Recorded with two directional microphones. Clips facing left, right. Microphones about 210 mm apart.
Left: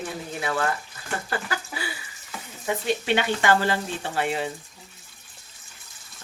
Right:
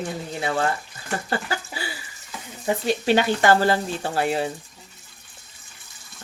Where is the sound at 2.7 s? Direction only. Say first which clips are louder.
Right 3 dB; 35° right (ahead or behind).